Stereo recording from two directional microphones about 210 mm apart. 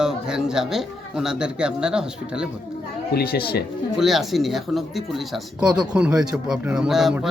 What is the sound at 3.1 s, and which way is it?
Speech, 45° left (ahead or behind).